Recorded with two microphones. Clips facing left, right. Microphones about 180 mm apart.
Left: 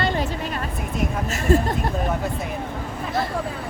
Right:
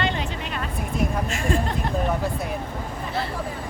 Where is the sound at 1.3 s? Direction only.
40° left (ahead or behind).